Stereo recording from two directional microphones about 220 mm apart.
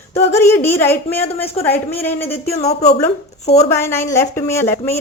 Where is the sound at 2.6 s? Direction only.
30° left (ahead or behind).